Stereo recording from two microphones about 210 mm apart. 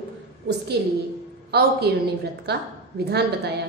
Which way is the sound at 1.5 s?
50° right (ahead or behind).